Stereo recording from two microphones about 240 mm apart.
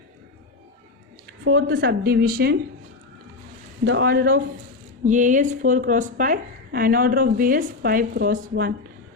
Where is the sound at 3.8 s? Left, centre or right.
Right.